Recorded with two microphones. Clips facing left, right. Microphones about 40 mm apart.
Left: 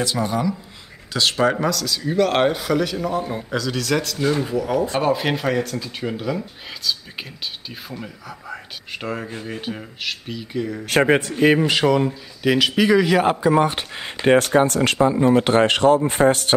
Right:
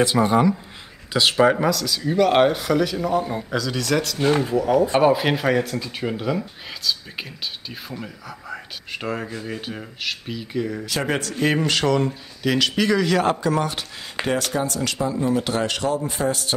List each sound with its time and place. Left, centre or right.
0.0 s speech: right
1.1 s speech: centre
11.1 s speech: left
11.4 s speech: centre; by 16.5 s left